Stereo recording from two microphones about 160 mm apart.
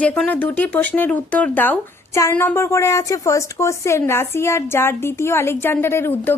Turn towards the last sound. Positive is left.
turn(degrees=15)  # may be behind; listen again after turning